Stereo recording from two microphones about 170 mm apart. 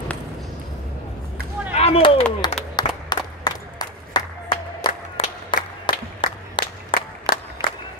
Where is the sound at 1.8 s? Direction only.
35° left (ahead or behind).